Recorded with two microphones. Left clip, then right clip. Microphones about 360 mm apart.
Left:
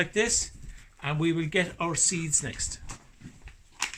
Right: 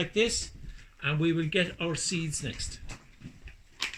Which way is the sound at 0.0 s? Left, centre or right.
Centre.